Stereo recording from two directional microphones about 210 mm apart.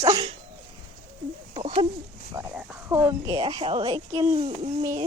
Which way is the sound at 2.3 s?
10° right (ahead or behind).